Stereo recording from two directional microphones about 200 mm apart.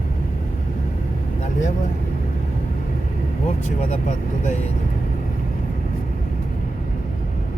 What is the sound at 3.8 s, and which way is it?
Speech, 35° left (ahead or behind).